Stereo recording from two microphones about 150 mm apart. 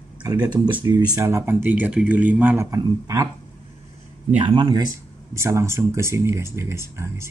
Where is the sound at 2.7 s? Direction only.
20° right (ahead or behind).